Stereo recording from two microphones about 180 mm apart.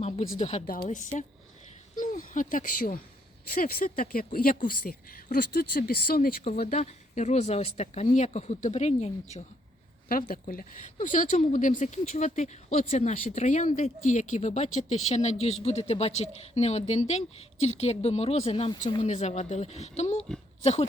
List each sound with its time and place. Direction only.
0.0 s a woman's voice: 40° left (ahead or behind); by 6.3 s 55° left (ahead or behind)
6.7 s a woman's voice: 40° left (ahead or behind)
10.1 s a woman's voice: 55° left (ahead or behind); by 20.2 s 35° left (ahead or behind)